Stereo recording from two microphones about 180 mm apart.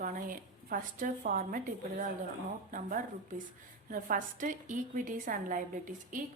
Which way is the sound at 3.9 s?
45° right (ahead or behind).